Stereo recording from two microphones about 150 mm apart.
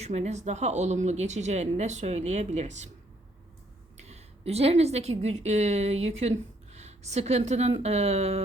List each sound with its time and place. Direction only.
0.0 s speech: 45° right (ahead or behind)
4.0 s a woman's voice: 45° right (ahead or behind)